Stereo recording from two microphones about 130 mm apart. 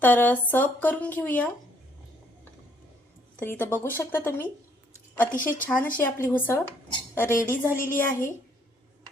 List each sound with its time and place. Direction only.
0.0 s speech: 15° left (ahead or behind)
3.4 s a woman's voice: 15° left (ahead or behind)